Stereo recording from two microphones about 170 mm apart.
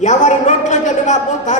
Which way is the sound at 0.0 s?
45° left (ahead or behind).